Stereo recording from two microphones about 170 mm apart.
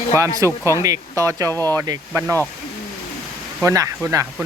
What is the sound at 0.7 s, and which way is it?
Speech, 20° right (ahead or behind).